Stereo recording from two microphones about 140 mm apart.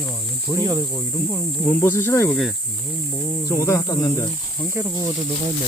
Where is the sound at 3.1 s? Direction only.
5° left (ahead or behind).